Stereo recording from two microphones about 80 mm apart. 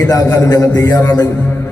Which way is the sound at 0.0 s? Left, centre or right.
Left.